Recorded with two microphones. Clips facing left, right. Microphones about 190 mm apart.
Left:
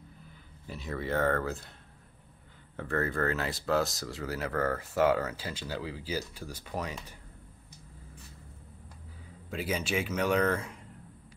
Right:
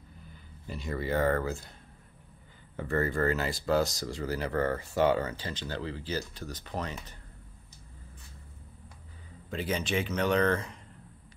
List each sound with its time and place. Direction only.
0.7 s speech: centre (ahead or behind)
2.7 s speech: centre (ahead or behind)
9.5 s speech: 5° left (ahead or behind)